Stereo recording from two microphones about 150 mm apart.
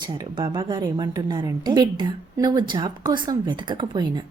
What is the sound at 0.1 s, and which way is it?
A woman's voice, 35° right (ahead or behind).